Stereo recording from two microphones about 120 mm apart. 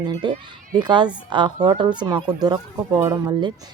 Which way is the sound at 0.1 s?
40° right (ahead or behind).